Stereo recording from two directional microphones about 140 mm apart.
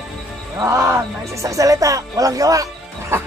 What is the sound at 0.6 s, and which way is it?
Speech, 20° right (ahead or behind).